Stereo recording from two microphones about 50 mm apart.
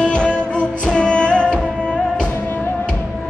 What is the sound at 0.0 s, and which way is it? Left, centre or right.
Music, left.